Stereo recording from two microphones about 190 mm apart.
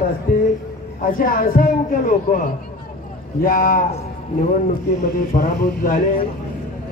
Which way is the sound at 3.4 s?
50° left (ahead or behind).